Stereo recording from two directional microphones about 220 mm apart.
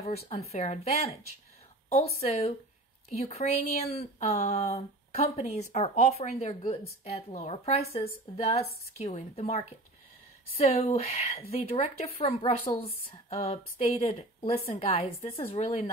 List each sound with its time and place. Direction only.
0.3 s speech: 30° left (ahead or behind)